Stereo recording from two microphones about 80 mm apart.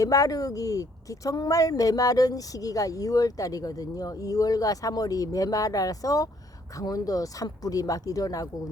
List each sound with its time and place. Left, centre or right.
0.0 s speech: left